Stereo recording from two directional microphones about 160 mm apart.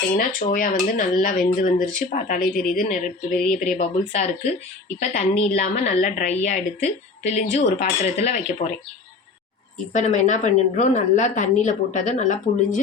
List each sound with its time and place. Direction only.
0.1 s speech: 60° left (ahead or behind)
3.3 s speech: centre (ahead or behind)
3.6 s a woman's voice: 45° left (ahead or behind)
9.9 s a woman's voice: 50° left (ahead or behind)